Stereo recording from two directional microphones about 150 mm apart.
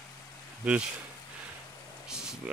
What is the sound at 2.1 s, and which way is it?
Rain on surface, 5° right (ahead or behind).